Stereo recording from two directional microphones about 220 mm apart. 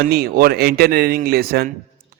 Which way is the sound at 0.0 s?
45° right (ahead or behind).